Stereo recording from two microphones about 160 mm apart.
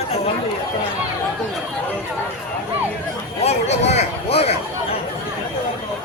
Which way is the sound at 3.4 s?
45° left (ahead or behind).